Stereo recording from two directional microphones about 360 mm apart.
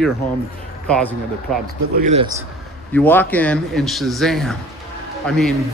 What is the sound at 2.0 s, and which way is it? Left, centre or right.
Speech, centre.